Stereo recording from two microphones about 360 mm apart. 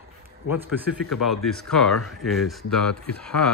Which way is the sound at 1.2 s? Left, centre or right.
Centre.